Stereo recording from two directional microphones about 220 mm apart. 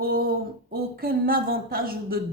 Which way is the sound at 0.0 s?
45° right (ahead or behind).